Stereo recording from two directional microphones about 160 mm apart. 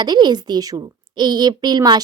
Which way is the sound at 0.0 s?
25° right (ahead or behind).